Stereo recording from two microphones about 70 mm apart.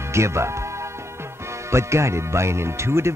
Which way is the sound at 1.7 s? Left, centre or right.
Right.